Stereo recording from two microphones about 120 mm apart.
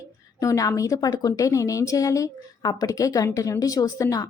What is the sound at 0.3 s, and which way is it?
A woman's voice, 30° left (ahead or behind).